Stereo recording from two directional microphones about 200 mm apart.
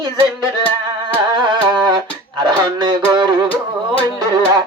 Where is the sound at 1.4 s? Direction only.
20° right (ahead or behind).